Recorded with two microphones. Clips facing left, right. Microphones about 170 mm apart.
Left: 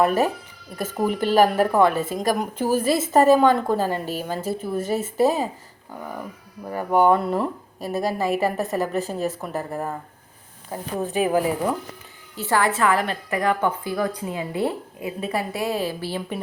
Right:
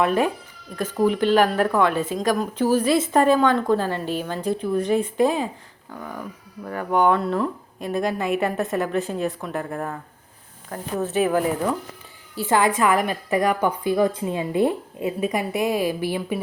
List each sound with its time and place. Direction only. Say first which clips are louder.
0.8 s a woman's voice: right 3 dB; 10° left (ahead or behind)
9.7 s a woman's voice: left 1 dB; 15° left (ahead or behind)
12.4 s a woman's voice: right 2 dB; 15° right (ahead or behind)